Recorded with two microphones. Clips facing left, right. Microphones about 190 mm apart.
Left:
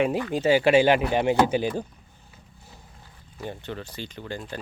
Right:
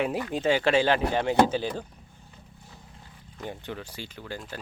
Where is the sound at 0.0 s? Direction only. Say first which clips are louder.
Left 3 dB; centre (ahead or behind).